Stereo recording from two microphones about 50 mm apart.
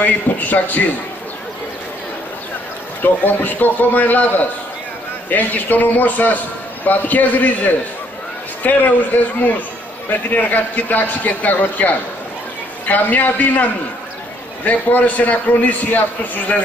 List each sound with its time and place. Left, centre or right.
0.0 s a man's voice: left
3.0 s a man's voice: left